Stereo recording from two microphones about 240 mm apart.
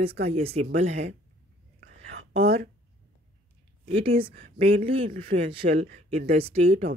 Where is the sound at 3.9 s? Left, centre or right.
Right.